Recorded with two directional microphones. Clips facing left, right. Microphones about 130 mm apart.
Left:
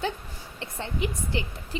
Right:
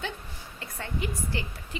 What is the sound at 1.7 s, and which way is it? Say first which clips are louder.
Speech: left 5 dB; 35° left (ahead or behind).